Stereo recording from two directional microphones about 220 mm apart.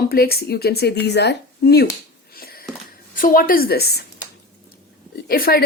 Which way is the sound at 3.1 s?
40° left (ahead or behind).